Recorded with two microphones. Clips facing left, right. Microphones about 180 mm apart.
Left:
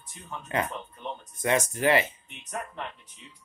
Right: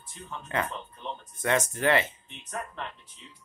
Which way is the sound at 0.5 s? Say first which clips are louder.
Left 2 dB; 15° left (ahead or behind).